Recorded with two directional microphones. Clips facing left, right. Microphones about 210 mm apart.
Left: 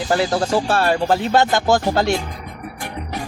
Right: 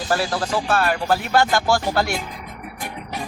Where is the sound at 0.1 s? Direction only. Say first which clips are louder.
Left 4 dB; 20° left (ahead or behind).